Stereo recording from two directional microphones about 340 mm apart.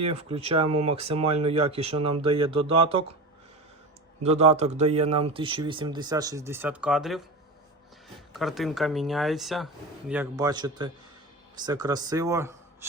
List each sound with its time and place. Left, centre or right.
0.0 s speech: centre
4.2 s speech: centre
8.3 s speech: centre